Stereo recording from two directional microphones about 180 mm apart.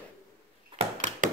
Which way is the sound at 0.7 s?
25° right (ahead or behind).